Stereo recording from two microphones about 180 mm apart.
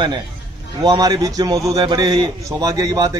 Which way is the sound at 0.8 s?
20° right (ahead or behind).